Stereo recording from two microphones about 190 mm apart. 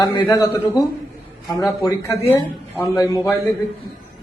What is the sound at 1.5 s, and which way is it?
A man's voice, 15° left (ahead or behind).